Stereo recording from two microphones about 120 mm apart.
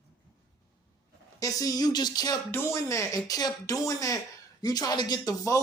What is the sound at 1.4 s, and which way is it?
Speech, 30° left (ahead or behind).